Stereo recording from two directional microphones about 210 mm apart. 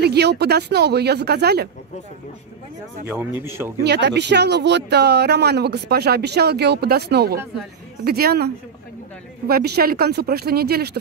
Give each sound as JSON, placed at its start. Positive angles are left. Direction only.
{"t": 0.0, "sound": "speech", "side_deg": -50}
{"t": 3.1, "sound": "speech", "side_deg": -10}
{"t": 3.8, "sound": "speech", "side_deg": -55}
{"t": 9.5, "sound": "speech", "side_deg": -50}